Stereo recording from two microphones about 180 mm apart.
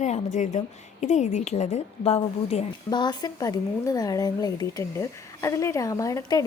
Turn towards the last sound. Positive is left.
turn(degrees=20)  # may be behind; listen again after turning